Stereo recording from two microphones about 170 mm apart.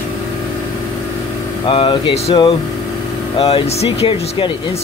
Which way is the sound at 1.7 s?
30° left (ahead or behind).